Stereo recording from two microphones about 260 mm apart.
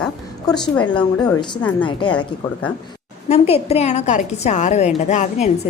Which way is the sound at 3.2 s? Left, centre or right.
Left.